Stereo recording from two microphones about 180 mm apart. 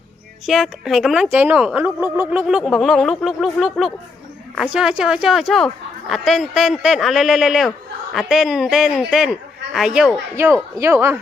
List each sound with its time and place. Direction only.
0.4 s a woman's voice: centre (ahead or behind)